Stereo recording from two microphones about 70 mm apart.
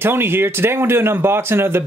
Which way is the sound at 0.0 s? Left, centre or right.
Right.